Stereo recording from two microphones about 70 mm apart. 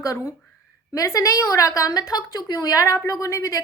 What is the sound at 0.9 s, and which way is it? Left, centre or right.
A woman's voice, left.